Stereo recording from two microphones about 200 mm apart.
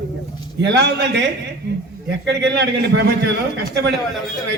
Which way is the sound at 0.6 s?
55° right (ahead or behind).